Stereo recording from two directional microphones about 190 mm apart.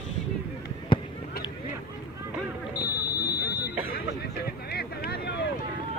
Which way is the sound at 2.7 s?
55° left (ahead or behind).